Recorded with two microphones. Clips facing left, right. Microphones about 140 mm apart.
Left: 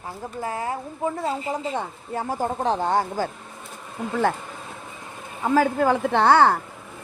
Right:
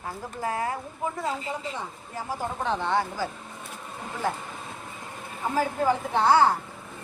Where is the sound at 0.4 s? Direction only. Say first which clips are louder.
Even; 25° left (ahead or behind).